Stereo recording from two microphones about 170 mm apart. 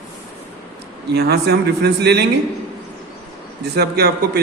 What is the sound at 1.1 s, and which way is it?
A man's voice, 75° right (ahead or behind).